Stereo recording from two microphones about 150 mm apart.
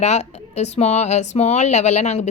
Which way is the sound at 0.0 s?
50° left (ahead or behind).